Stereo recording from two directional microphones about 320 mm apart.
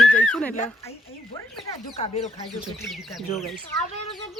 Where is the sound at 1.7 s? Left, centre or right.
Centre.